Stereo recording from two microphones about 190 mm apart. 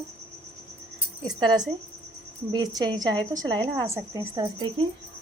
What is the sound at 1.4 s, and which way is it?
A woman's voice, 20° right (ahead or behind).